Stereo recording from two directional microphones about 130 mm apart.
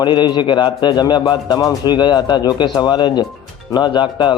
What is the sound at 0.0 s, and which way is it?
A man's voice, 35° left (ahead or behind).